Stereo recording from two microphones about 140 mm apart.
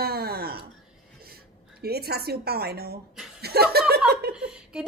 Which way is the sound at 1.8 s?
90° right.